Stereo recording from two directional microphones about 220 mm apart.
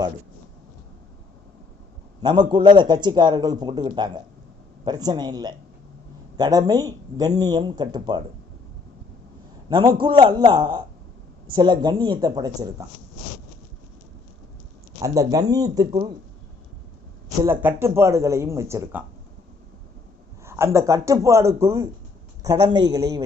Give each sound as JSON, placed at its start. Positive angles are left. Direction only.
{"t": 2.2, "sound": "a man's voice", "side_deg": -20}
{"t": 9.6, "sound": "a man's voice", "side_deg": -20}
{"t": 15.0, "sound": "speech", "side_deg": -15}
{"t": 17.4, "sound": "speech", "side_deg": -10}
{"t": 20.4, "sound": "speech", "side_deg": -10}